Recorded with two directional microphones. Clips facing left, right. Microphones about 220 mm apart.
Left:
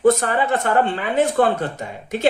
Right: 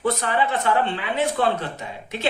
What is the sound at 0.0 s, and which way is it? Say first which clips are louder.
Speech: left 6 dB; 45° left (ahead or behind).